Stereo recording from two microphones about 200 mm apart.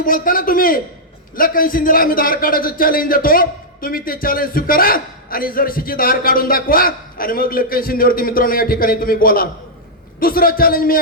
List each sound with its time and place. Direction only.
0.0 s a man's voice: 45° left (ahead or behind)